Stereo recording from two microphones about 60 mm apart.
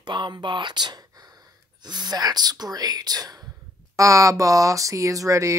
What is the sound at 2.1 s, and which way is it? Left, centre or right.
Speech, right.